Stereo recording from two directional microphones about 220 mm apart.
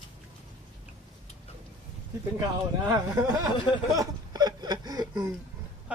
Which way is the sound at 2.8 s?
15° right (ahead or behind).